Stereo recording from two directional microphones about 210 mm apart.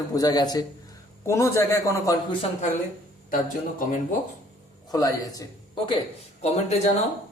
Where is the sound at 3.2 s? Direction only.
40° left (ahead or behind).